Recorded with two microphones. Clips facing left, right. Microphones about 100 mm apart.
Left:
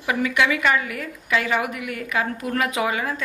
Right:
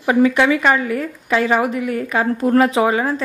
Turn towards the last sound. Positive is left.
turn(degrees=-35)  # may be behind; listen again after turning